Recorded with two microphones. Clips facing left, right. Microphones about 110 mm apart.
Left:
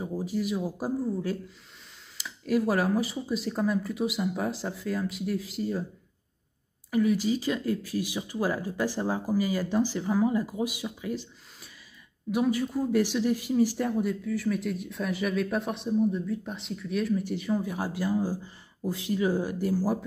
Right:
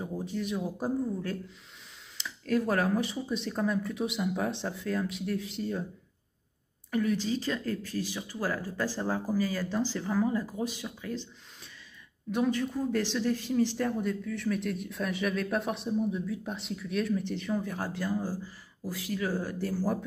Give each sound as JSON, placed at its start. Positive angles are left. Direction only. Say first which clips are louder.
{"t": 0.0, "sound": "speech", "louder": "left 4 dB", "side_deg": 5}
{"t": 6.9, "sound": "speech", "louder": "left 4 dB", "side_deg": 5}